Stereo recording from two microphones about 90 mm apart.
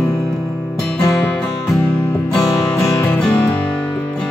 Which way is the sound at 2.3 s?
5° left (ahead or behind).